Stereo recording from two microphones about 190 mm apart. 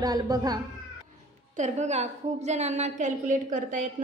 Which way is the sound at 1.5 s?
40° right (ahead or behind).